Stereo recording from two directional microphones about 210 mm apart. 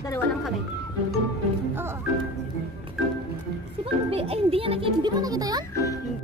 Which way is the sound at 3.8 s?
25° right (ahead or behind).